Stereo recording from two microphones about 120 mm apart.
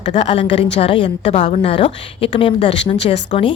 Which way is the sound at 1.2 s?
75° left (ahead or behind).